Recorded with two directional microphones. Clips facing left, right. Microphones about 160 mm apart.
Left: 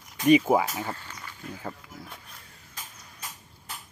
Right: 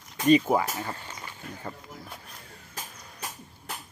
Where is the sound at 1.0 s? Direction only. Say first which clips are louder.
Right 2 dB; 20° right (ahead or behind).